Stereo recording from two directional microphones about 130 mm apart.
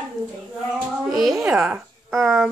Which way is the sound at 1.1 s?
Centre (ahead or behind).